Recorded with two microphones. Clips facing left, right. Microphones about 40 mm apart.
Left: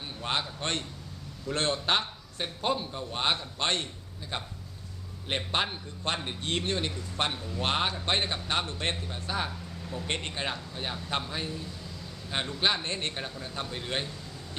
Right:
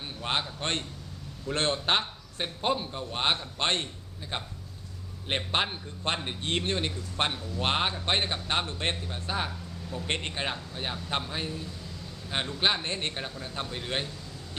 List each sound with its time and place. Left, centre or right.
0.2 s a man's voice: centre
9.5 s a sound: centre
10.1 s a man's voice: centre